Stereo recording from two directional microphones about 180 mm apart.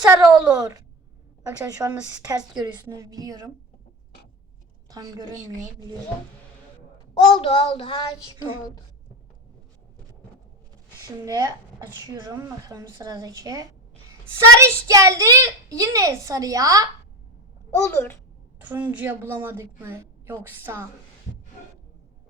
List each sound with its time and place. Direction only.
0.0 s a woman's voice: 15° right (ahead or behind)
2.2 s a child's voice: 20° right (ahead or behind)
4.9 s a woman's voice: 20° right (ahead or behind)
7.1 s child singing: 30° left (ahead or behind)
11.3 s a child's voice: 20° right (ahead or behind)
17.7 s a child's voice: 15° left (ahead or behind)
18.6 s a woman's voice: 10° right (ahead or behind)